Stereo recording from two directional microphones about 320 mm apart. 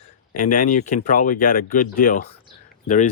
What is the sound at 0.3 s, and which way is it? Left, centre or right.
Speech, left.